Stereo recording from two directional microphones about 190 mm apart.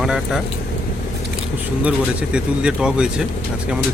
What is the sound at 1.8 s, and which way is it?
Speech, 5° right (ahead or behind).